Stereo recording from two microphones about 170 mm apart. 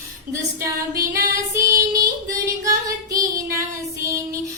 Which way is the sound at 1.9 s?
20° right (ahead or behind).